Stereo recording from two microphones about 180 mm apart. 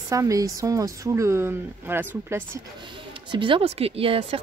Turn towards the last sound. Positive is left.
turn(degrees=-30)  # may be behind; listen again after turning